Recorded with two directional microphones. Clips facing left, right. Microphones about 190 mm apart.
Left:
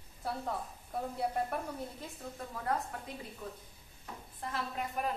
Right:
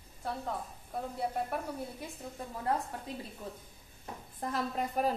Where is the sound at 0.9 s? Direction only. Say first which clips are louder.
Even; centre (ahead or behind).